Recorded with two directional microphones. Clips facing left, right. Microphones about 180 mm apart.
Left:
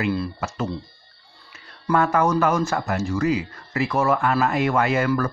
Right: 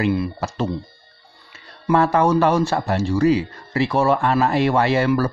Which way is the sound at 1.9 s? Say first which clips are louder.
Right 3 dB; 30° right (ahead or behind).